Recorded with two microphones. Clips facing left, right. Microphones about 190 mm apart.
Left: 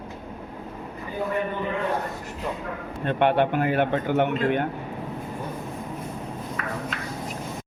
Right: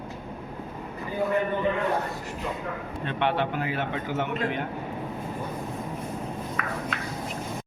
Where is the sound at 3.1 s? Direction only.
50° left (ahead or behind).